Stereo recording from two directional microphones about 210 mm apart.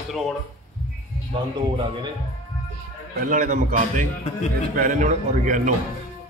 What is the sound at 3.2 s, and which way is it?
A man's voice, 40° right (ahead or behind).